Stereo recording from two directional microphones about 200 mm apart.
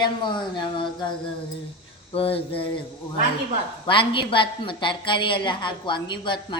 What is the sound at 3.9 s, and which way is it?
A woman's voice, 25° left (ahead or behind).